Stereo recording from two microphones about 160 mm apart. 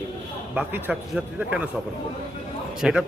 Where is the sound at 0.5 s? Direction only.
10° right (ahead or behind).